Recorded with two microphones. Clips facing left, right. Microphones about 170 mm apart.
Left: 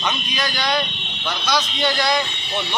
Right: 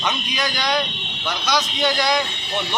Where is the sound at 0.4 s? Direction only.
15° right (ahead or behind).